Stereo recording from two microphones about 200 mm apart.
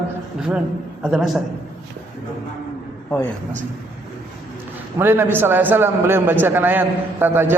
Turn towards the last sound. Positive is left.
turn(degrees=-10)  # may be behind; listen again after turning